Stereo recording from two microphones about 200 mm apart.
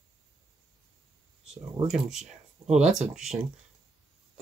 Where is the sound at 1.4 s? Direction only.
Centre (ahead or behind).